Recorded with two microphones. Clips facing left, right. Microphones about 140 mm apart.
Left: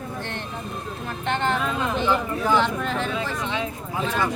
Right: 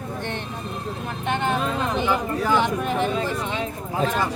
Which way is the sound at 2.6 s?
15° right (ahead or behind).